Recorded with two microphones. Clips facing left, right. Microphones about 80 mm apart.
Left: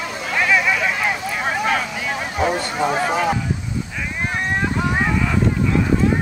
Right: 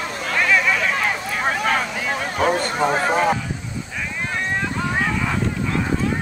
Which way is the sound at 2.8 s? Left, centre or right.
Right.